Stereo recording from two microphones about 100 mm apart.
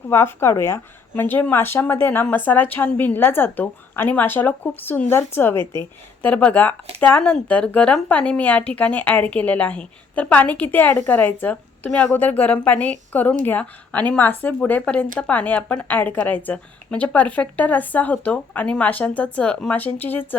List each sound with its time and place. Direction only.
0.1 s a woman's voice: 25° left (ahead or behind)
11.9 s speech: 10° left (ahead or behind)